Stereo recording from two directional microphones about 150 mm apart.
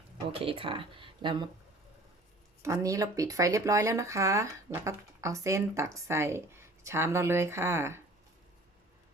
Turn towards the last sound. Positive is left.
turn(degrees=-15)  # may be behind; listen again after turning